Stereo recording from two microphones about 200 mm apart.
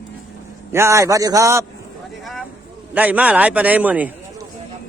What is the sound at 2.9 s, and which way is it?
A man's voice, 10° right (ahead or behind).